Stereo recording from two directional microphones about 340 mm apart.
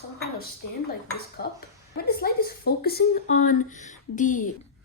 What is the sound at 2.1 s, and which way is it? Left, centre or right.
A woman's voice, left.